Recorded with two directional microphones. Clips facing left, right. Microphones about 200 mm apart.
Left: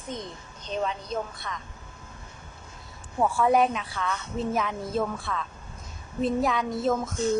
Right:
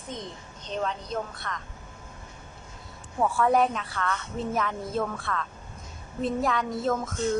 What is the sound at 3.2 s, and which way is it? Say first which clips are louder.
A woman's voice: left 1 dB; 5° left (ahead or behind).